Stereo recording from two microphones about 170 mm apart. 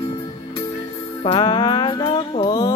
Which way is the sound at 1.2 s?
25° left (ahead or behind).